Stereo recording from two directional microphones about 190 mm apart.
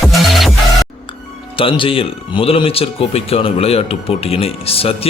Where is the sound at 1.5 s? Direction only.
30° left (ahead or behind).